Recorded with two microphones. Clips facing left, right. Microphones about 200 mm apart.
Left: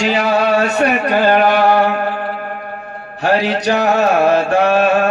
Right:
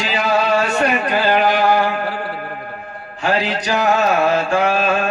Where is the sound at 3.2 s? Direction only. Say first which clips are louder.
Left 4 dB; 65° left (ahead or behind).